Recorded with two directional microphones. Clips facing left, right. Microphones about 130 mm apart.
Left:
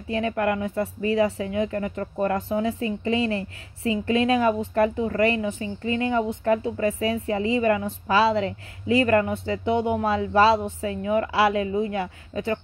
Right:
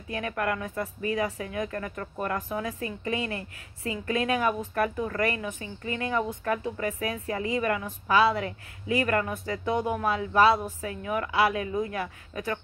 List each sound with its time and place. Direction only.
0.1 s a woman's voice: 30° left (ahead or behind)